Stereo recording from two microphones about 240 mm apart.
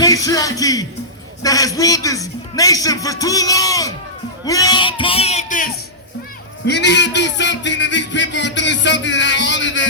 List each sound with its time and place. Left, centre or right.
0.0 s a man's voice: centre; by 5.7 s left
6.7 s speech: left